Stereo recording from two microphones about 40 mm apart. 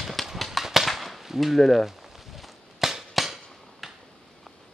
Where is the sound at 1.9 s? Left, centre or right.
Centre.